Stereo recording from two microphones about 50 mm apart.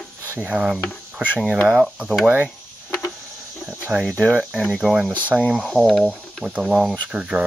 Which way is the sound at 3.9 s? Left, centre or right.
Right.